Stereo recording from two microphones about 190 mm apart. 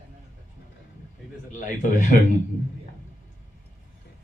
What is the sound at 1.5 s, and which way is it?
Speech, 40° left (ahead or behind).